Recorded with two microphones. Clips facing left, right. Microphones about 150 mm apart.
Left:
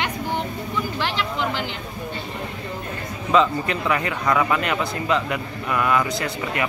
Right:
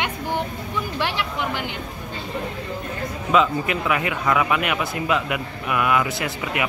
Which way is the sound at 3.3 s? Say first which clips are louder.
Left 1 dB; 10° right (ahead or behind).